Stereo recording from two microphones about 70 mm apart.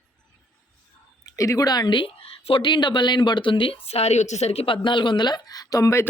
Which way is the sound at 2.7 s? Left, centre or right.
Left.